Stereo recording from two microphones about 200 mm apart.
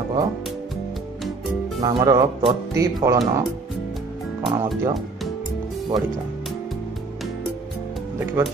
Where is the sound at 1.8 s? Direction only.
20° right (ahead or behind).